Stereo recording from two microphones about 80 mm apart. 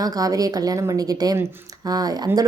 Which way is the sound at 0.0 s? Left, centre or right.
Right.